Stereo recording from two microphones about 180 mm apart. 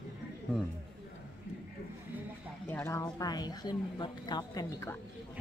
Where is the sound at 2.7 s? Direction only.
10° left (ahead or behind).